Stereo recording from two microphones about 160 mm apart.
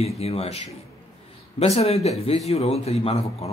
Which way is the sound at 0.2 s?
40° left (ahead or behind).